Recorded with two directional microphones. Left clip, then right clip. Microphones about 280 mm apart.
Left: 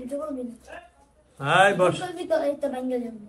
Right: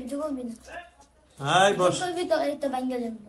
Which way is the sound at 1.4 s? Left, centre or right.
Centre.